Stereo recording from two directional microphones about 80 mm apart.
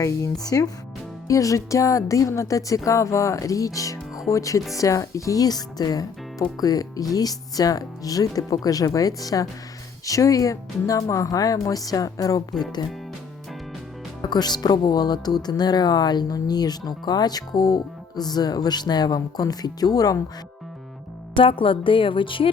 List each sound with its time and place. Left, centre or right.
0.4 s speech: left
14.2 s speech: left
21.3 s a woman's voice: left